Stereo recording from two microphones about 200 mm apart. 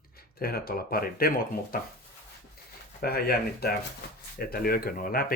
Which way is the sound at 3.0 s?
50° left (ahead or behind).